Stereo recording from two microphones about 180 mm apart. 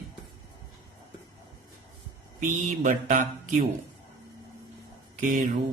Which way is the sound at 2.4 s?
45° right (ahead or behind).